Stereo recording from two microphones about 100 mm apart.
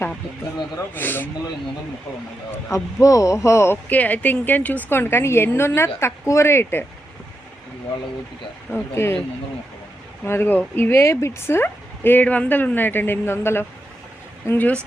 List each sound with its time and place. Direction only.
0.9 s speech: 20° left (ahead or behind)
2.5 s speech: 30° left (ahead or behind)
8.7 s speech: 25° left (ahead or behind)
10.2 s speech: 25° left (ahead or behind)